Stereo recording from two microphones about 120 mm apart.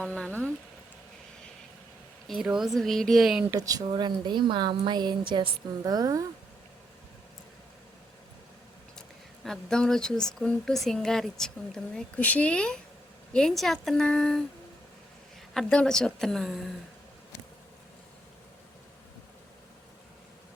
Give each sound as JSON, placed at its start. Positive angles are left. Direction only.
{"t": 0.0, "sound": "speech", "side_deg": 10}
{"t": 2.2, "sound": "speech", "side_deg": 0}
{"t": 3.5, "sound": "a woman's voice", "side_deg": -30}
{"t": 5.8, "sound": "speech", "side_deg": -30}
{"t": 9.0, "sound": "a sound", "side_deg": 5}
{"t": 10.3, "sound": "speech", "side_deg": 5}
{"t": 15.5, "sound": "speech", "side_deg": 5}